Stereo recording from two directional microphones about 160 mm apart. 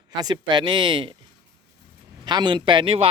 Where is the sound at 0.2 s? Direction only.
25° right (ahead or behind).